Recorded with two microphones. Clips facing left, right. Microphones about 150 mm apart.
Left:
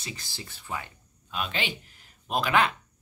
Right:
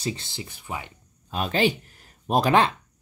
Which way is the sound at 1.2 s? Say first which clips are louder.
Right 9 dB; 40° right (ahead or behind).